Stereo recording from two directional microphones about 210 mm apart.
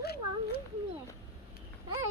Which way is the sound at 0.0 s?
50° left (ahead or behind).